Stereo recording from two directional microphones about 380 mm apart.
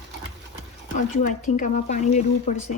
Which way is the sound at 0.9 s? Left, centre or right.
Centre.